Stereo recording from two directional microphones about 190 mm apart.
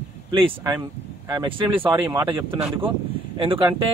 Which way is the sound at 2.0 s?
20° right (ahead or behind).